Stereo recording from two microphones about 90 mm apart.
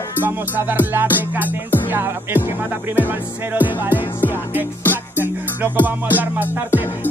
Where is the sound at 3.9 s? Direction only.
20° left (ahead or behind).